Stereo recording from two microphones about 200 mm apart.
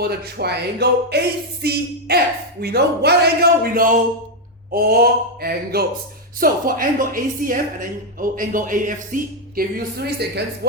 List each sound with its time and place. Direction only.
0.0 s a woman's voice: 55° right (ahead or behind)